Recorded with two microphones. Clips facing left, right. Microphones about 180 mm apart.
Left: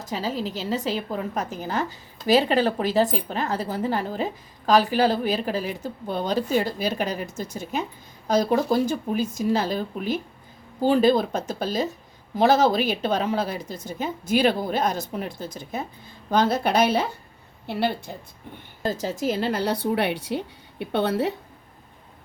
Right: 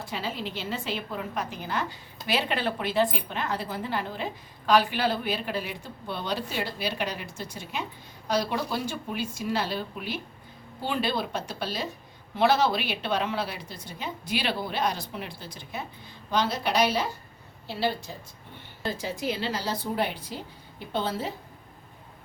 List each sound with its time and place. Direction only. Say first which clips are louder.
0.0 s a woman's voice: left 5 dB; 40° left (ahead or behind); by 18.1 s 60° left (ahead or behind)
18.8 s speech: left 5 dB; 40° left (ahead or behind); by 21.3 s 70° left (ahead or behind)